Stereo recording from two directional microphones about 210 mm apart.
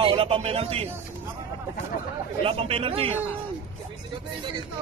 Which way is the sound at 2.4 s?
25° right (ahead or behind).